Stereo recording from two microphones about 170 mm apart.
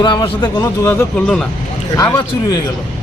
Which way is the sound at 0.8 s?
15° left (ahead or behind).